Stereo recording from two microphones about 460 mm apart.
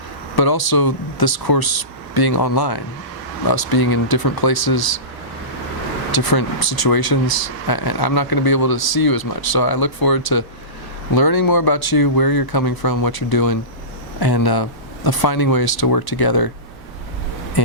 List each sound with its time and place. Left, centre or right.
0.3 s speech: left
6.1 s speech: left